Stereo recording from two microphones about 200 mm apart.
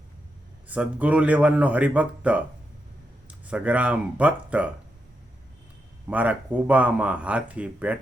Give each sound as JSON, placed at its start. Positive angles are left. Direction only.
{"t": 0.7, "sound": "speech", "side_deg": -5}
{"t": 6.1, "sound": "speech", "side_deg": -10}